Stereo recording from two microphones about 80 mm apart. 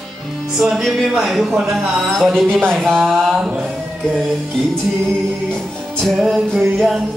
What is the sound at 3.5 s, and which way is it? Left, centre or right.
Music, centre.